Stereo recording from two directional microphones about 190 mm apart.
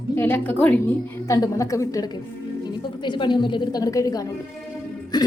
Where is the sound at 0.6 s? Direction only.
10° left (ahead or behind).